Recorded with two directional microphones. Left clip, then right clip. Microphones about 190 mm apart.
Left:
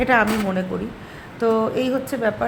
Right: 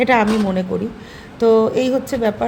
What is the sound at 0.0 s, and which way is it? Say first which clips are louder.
Speech: right 3 dB; 15° right (ahead or behind).